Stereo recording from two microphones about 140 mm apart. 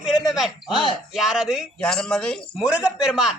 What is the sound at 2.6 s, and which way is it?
Speech, 10° right (ahead or behind).